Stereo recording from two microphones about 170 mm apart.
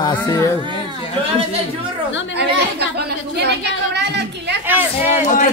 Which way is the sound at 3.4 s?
80° right.